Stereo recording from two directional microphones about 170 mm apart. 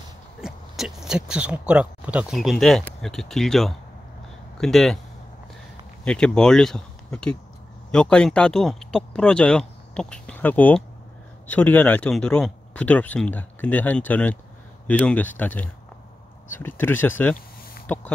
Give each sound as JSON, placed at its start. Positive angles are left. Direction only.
{"t": 0.4, "sound": "speech", "side_deg": -5}
{"t": 6.0, "sound": "speech", "side_deg": 5}